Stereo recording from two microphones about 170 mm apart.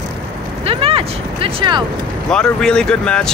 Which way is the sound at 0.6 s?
35° right (ahead or behind).